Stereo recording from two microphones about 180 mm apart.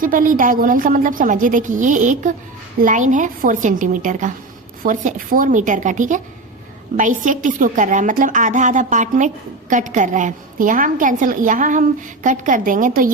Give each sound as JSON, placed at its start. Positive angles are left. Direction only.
{"t": 0.0, "sound": "a woman's voice", "side_deg": -45}